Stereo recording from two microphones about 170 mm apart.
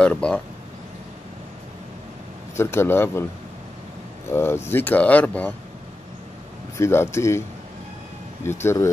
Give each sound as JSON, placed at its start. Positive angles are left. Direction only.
{"t": 0.0, "sound": "speech", "side_deg": 5}
{"t": 2.5, "sound": "speech", "side_deg": 15}
{"t": 4.3, "sound": "speech", "side_deg": 15}
{"t": 6.8, "sound": "speech", "side_deg": 15}
{"t": 8.5, "sound": "speech", "side_deg": 15}